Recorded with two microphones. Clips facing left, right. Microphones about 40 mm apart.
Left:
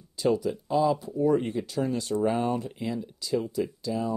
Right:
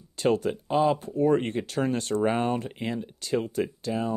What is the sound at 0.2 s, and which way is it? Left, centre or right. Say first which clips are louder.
Speech: right 1 dB; right.